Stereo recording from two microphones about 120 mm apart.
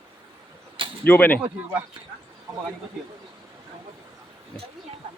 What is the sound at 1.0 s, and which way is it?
Speech, 15° left (ahead or behind).